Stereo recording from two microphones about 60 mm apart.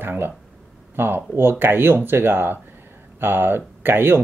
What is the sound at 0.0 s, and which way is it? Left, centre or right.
Speech, right.